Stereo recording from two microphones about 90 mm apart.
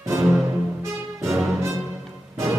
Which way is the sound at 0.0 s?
35° right (ahead or behind).